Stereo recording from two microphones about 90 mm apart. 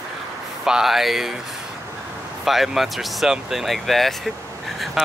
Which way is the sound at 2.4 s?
Centre (ahead or behind).